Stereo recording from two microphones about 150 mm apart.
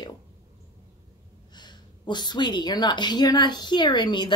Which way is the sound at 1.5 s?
30° left (ahead or behind).